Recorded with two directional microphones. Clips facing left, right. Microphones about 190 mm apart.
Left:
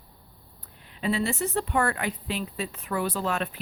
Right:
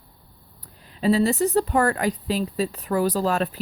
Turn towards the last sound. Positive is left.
turn(degrees=-35)  # may be behind; listen again after turning